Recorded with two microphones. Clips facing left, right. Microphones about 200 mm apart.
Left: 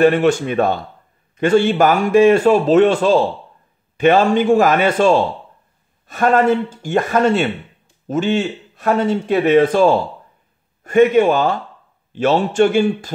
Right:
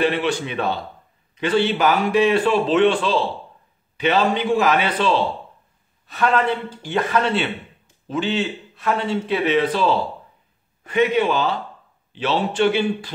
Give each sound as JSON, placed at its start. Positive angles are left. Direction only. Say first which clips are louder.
{"t": 0.0, "sound": "a man's voice", "louder": "left 8 dB", "side_deg": 45}